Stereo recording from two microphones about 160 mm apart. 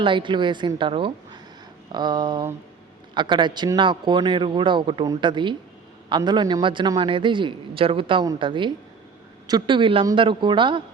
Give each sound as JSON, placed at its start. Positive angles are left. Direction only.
{"t": 0.0, "sound": "a man's voice", "side_deg": -30}